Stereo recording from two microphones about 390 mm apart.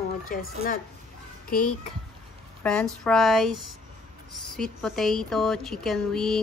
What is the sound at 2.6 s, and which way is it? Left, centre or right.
A woman's voice, centre.